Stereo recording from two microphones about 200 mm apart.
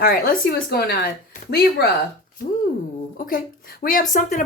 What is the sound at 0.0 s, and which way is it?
Speech, 45° left (ahead or behind).